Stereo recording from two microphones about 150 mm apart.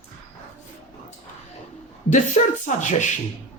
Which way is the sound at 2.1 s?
55° left (ahead or behind).